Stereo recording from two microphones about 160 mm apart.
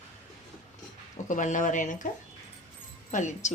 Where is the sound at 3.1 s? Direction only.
50° left (ahead or behind).